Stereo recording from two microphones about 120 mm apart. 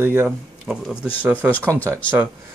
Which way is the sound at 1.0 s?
15° left (ahead or behind).